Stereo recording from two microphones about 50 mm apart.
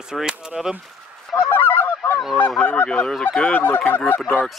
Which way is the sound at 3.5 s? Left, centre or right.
Left.